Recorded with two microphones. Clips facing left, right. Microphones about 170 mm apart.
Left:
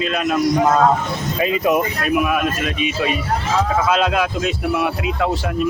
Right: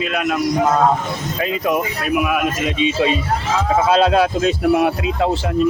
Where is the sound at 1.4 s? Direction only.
5° left (ahead or behind).